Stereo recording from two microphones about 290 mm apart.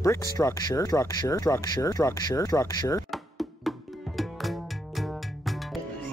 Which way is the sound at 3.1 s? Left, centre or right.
Centre.